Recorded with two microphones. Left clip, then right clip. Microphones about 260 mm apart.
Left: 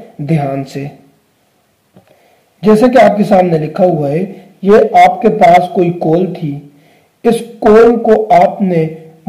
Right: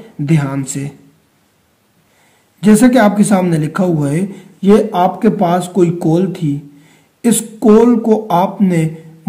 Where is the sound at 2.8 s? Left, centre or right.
Right.